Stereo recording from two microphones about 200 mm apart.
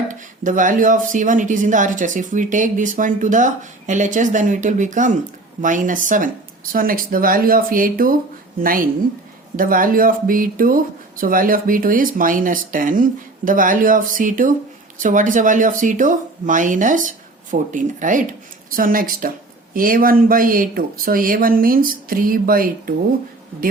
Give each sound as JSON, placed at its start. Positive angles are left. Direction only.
{"t": 0.1, "sound": "speech", "side_deg": -40}